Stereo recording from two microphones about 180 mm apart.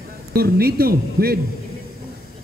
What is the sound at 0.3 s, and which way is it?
Speech, 60° right (ahead or behind).